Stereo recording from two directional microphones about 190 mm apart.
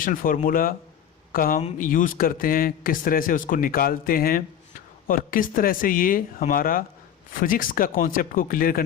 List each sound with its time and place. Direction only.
0.0 s a man's voice: 45° left (ahead or behind)